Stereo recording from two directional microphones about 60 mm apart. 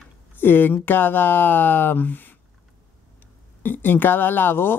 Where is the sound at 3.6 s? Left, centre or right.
Left.